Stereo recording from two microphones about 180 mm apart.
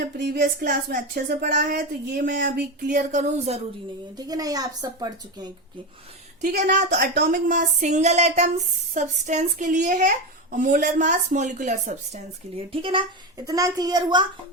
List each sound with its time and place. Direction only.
0.2 s speech: 65° right (ahead or behind)
2.9 s speech: 45° right (ahead or behind)
4.2 s a woman's voice: 20° right (ahead or behind)
6.7 s speech: 55° right (ahead or behind); by 14.3 s 20° right (ahead or behind)